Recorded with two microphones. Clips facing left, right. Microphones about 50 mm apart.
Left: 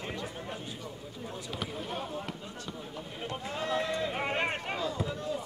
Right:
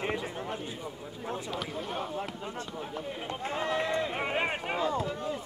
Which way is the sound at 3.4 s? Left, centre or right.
Right.